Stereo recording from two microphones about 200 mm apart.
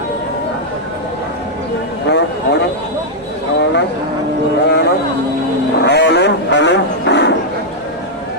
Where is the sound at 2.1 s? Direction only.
55° left (ahead or behind).